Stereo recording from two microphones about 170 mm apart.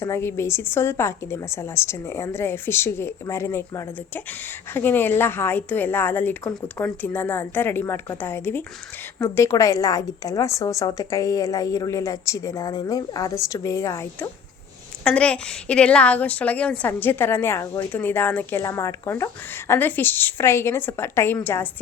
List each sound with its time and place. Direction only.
0.0 s a woman's voice: 15° left (ahead or behind)
15.0 s a woman's voice: 5° left (ahead or behind)